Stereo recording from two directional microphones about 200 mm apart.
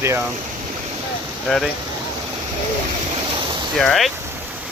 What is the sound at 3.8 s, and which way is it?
Speech, centre (ahead or behind).